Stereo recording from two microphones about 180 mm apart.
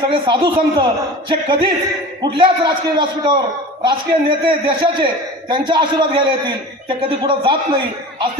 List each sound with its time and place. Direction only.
0.1 s a man's voice: 25° right (ahead or behind)